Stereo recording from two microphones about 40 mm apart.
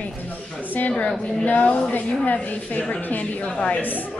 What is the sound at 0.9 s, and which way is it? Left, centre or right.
A woman's voice, left.